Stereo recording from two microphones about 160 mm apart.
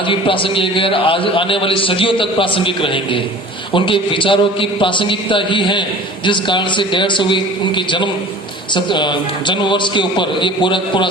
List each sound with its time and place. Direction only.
0.0 s a man's voice: 35° left (ahead or behind)